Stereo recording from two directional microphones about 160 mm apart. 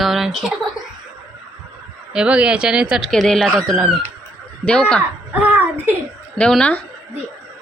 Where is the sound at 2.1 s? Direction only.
5° right (ahead or behind).